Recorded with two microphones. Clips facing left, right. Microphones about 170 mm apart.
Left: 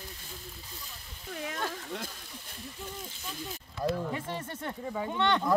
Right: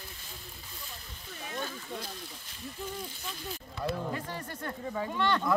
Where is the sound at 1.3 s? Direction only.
75° left (ahead or behind).